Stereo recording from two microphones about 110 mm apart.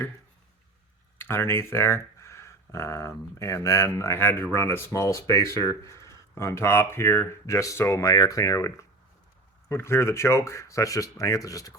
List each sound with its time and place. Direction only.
1.2 s speech: 20° left (ahead or behind)